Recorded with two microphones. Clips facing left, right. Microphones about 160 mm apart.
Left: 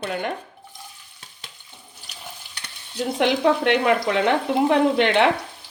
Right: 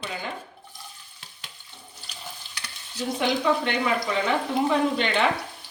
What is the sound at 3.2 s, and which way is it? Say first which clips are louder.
Speech: left 5 dB; 75° left (ahead or behind).